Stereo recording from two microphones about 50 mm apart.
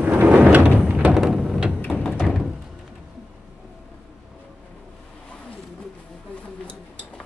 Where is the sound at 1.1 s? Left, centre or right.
Centre.